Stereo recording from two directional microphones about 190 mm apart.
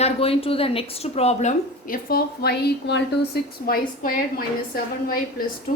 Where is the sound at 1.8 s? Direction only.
50° left (ahead or behind).